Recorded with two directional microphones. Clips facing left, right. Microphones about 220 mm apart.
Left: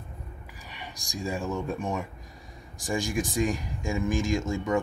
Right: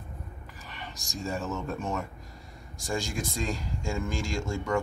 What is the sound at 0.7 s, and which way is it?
Speech, 15° left (ahead or behind).